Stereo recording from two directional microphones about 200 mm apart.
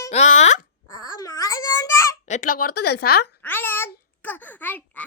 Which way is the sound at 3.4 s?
10° left (ahead or behind).